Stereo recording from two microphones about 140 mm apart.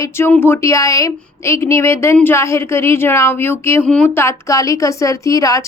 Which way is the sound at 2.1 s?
15° left (ahead or behind).